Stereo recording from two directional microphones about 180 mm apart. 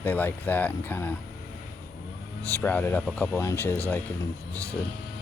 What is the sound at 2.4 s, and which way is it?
Speech, 10° left (ahead or behind).